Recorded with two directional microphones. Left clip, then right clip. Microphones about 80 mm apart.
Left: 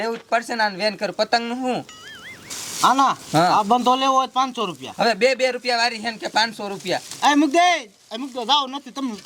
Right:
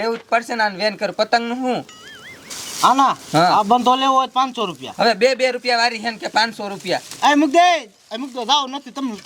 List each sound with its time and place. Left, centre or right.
0.0 s speech: right
2.5 s a sound: centre
2.9 s speech: centre
4.9 s speech: right
7.2 s speech: right